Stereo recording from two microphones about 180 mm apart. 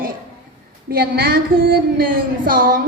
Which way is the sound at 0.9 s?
55° right (ahead or behind).